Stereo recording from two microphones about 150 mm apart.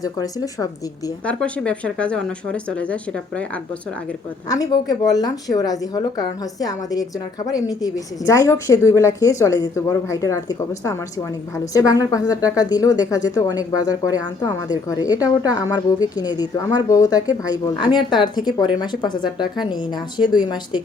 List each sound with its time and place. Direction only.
0.0 s speech: 25° left (ahead or behind)
1.2 s speech: 10° left (ahead or behind)
4.4 s speech: 25° left (ahead or behind)